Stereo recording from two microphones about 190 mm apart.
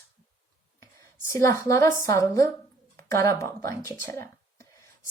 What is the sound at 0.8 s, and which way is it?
A woman's voice, 15° left (ahead or behind).